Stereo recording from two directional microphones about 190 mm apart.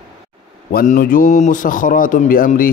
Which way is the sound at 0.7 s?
45° left (ahead or behind).